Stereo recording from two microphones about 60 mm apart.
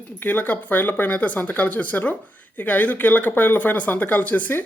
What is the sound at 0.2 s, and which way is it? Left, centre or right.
Speech, left.